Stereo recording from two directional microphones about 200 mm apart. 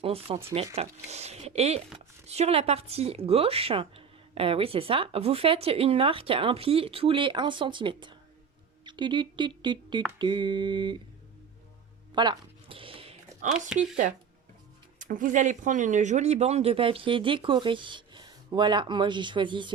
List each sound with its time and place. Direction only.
0.0 s a woman's voice: 30° right (ahead or behind)
12.1 s a sound: 20° right (ahead or behind)
14.9 s a woman's voice: 40° right (ahead or behind); by 19.7 s 25° right (ahead or behind)